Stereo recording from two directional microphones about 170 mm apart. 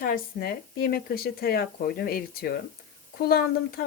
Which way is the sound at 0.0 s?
60° left (ahead or behind).